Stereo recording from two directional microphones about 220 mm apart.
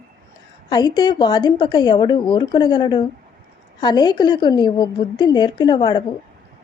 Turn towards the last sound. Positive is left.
turn(degrees=20)  # may be behind; listen again after turning